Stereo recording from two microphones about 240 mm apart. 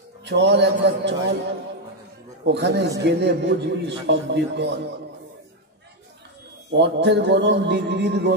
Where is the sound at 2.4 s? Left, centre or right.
Right.